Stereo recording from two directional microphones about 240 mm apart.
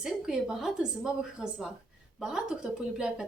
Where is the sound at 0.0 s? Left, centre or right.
Centre.